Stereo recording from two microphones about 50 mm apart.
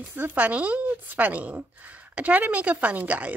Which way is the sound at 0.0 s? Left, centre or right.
Right.